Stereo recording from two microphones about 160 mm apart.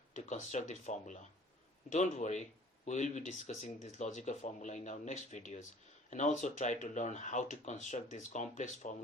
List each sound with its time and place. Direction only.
0.1 s speech: 50° left (ahead or behind)